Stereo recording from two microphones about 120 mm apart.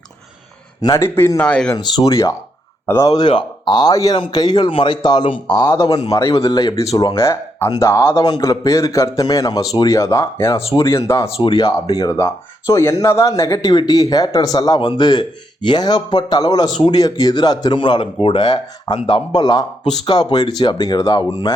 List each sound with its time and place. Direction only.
0.8 s a man's voice: 30° left (ahead or behind)
1.5 s speech: 10° left (ahead or behind)
1.7 s a man's voice: 30° left (ahead or behind)
2.8 s speech: 20° left (ahead or behind)
3.1 s a man's voice: 40° left (ahead or behind)